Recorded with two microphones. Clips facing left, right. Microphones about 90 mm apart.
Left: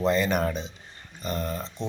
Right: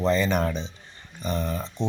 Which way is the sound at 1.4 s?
15° right (ahead or behind).